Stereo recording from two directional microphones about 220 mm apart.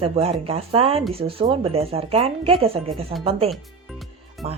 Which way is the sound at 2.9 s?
Centre (ahead or behind).